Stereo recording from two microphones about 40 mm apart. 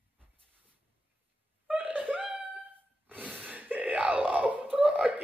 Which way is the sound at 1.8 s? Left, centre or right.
Right.